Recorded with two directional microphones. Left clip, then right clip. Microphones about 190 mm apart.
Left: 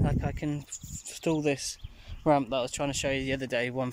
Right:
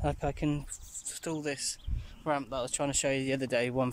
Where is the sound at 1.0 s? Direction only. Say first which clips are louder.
Left 7 dB; 15° left (ahead or behind).